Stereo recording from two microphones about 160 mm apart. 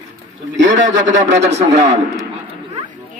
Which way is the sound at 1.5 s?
45° right (ahead or behind).